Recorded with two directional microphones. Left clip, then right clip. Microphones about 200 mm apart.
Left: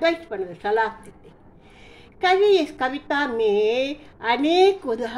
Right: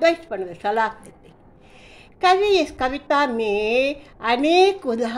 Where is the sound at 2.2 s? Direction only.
25° right (ahead or behind).